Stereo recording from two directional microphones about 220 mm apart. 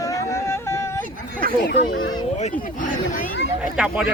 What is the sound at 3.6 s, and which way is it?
Speech, 5° right (ahead or behind).